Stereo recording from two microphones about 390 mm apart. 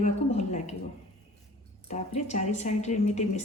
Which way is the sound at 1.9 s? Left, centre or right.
Centre.